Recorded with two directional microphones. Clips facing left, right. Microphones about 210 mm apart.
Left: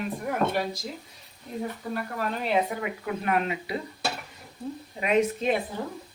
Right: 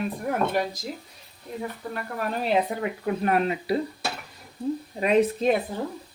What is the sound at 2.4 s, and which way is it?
Speech, 35° right (ahead or behind).